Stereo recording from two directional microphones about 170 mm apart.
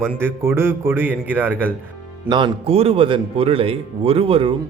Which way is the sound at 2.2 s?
30° right (ahead or behind).